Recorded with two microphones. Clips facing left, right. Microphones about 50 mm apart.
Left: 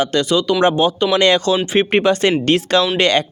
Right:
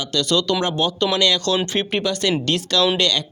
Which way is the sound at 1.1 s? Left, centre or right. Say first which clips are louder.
Left 6 dB; left.